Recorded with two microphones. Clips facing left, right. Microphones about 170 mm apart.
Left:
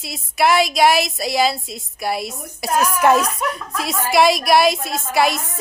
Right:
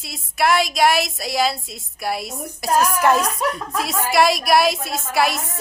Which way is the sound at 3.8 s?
Centre (ahead or behind).